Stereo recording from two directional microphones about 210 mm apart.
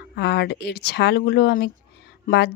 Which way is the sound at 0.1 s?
55° left (ahead or behind).